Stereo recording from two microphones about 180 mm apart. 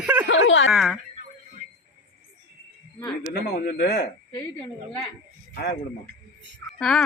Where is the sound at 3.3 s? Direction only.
60° left (ahead or behind).